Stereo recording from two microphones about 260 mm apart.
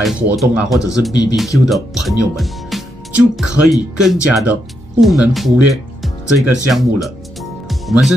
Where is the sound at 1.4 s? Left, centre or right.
Centre.